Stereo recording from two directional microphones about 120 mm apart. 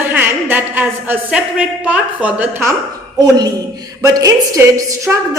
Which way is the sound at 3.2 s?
35° right (ahead or behind).